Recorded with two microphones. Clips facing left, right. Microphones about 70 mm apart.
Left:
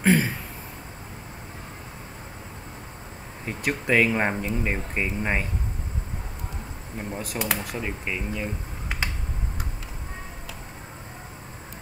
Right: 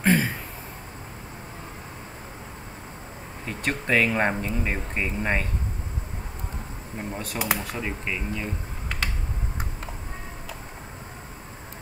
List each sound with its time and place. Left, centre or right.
0.0 s a sound: centre
3.4 s speech: centre
7.1 s speech: centre
7.7 s speech: centre